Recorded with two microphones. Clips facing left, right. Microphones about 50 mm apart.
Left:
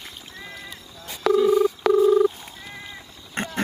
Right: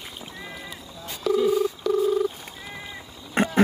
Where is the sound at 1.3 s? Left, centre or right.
Left.